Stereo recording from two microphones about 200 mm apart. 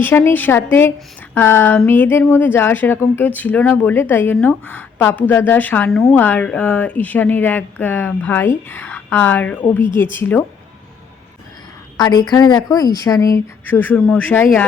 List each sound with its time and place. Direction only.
0.0 s a woman's voice: 10° left (ahead or behind)
11.9 s a woman's voice: 20° left (ahead or behind)